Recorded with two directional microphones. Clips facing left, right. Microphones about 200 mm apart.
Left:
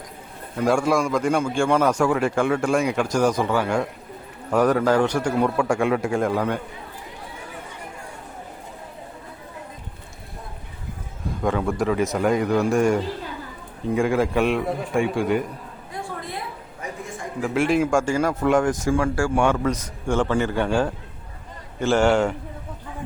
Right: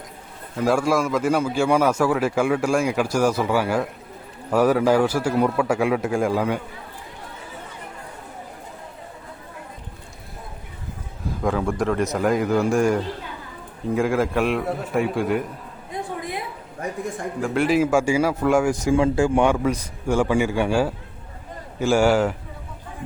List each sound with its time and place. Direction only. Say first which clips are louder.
0.5 s a man's voice: even; centre (ahead or behind)
11.3 s a man's voice: even; centre (ahead or behind)
15.9 s a sound: right 3 dB; 20° right (ahead or behind)
17.4 s a man's voice: right 1 dB; centre (ahead or behind)